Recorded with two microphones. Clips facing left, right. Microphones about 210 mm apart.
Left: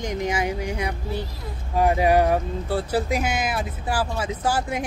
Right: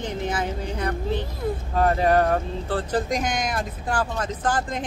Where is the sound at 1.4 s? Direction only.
50° right (ahead or behind).